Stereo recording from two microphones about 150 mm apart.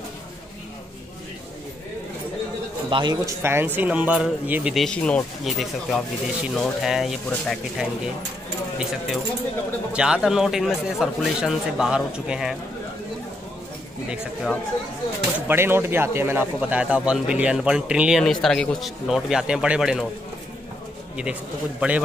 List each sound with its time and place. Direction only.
2.9 s a man's voice: 30° right (ahead or behind)
3.4 s speech: 15° right (ahead or behind)
4.7 s speech: 5° left (ahead or behind)
9.9 s speech: 5° right (ahead or behind)
14.0 s speech: 5° right (ahead or behind)
15.4 s speech: 15° right (ahead or behind)
21.2 s speech: 10° right (ahead or behind)